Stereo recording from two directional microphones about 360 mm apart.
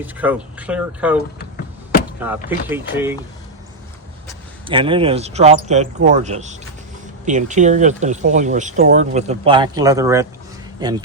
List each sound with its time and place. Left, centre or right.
0.0 s speech: centre
2.2 s speech: centre
4.6 s a man's voice: centre